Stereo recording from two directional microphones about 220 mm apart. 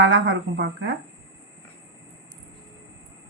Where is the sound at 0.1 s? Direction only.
50° right (ahead or behind).